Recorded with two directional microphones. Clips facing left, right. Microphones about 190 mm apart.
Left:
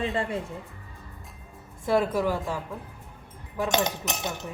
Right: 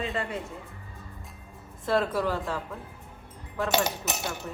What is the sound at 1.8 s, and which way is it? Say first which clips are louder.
Speech: left 2 dB; 10° left (ahead or behind).